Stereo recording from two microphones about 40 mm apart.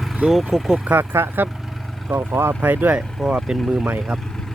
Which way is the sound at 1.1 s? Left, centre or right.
Right.